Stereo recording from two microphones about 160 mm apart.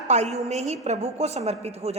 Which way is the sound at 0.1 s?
45° right (ahead or behind).